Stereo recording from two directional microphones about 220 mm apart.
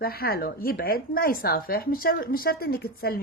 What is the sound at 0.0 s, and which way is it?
A woman's voice, 45° left (ahead or behind).